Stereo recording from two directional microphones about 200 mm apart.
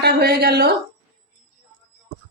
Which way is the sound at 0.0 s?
50° right (ahead or behind).